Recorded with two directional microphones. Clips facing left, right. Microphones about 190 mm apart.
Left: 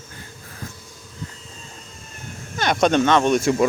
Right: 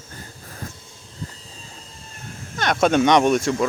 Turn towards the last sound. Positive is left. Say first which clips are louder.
# left 2 dB
turn(degrees=10)  # may be behind; listen again after turning